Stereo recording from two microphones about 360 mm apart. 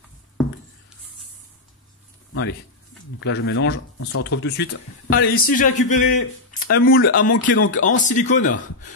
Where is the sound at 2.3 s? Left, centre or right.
Left.